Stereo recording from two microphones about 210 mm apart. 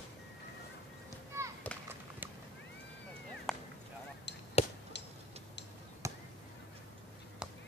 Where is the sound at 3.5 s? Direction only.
Centre (ahead or behind).